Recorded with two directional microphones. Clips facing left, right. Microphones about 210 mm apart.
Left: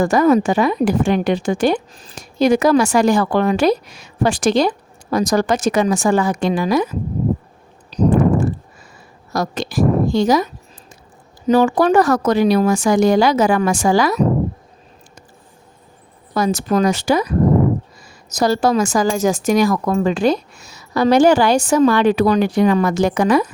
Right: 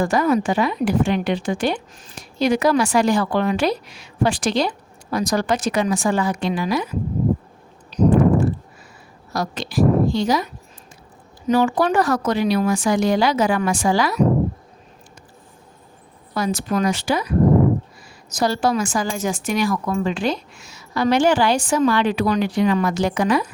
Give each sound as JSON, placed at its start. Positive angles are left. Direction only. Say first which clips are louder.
{"t": 0.0, "sound": "a woman's voice", "louder": "left 5 dB", "side_deg": 45}
{"t": 7.9, "sound": "a sound", "louder": "left 1 dB", "side_deg": 35}
{"t": 9.3, "sound": "a woman's voice", "louder": "left 3 dB", "side_deg": 45}
{"t": 16.3, "sound": "a woman's voice", "louder": "left 5 dB", "side_deg": 45}
{"t": 18.3, "sound": "a woman's voice", "louder": "left 4 dB", "side_deg": 40}